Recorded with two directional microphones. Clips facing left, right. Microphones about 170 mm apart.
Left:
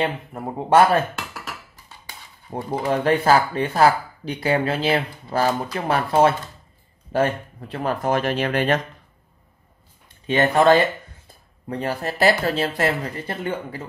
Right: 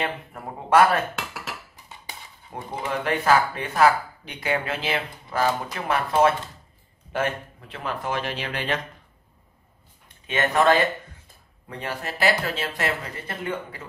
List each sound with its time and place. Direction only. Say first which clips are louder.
0.3 s speech: left 2 dB; 30° left (ahead or behind)
2.5 s speech: left 7 dB; 35° left (ahead or behind)
10.2 s speech: left 4 dB; 30° left (ahead or behind)